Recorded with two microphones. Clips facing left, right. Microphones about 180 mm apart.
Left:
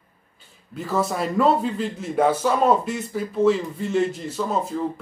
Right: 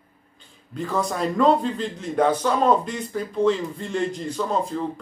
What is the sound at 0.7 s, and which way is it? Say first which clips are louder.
A man's voice: left 1 dB; 5° left (ahead or behind).